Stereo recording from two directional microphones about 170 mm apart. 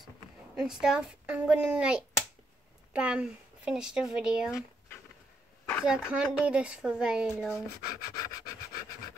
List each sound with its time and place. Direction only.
0.6 s speech: 5° right (ahead or behind)
5.9 s speech: 5° right (ahead or behind)
7.5 s speech: 20° left (ahead or behind)